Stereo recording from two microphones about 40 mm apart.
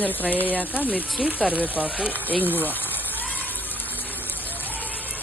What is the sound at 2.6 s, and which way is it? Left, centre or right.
Gush, left.